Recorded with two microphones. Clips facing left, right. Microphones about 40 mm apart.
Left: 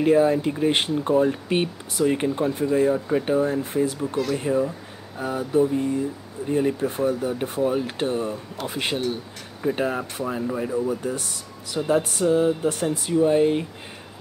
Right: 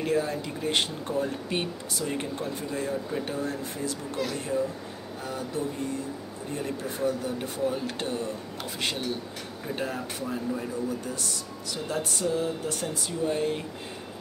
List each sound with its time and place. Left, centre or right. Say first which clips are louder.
0.0 s speech: left 9 dB; left